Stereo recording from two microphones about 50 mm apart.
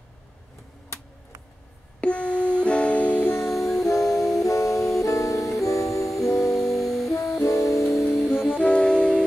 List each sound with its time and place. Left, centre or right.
2.0 s music: left
3.3 s music: centre
4.5 s music: left
6.0 s music: centre
7.1 s music: left
7.8 s music: centre
8.5 s music: left